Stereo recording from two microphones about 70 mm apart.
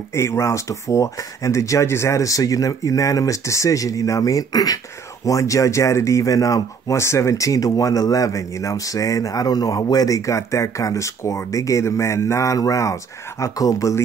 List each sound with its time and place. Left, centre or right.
0.1 s speech: left
5.2 s speech: left